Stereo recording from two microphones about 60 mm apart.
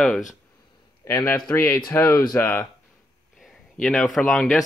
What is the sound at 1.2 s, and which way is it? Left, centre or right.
Speech, left.